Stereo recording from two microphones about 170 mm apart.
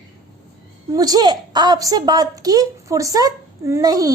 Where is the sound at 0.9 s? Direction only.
20° right (ahead or behind).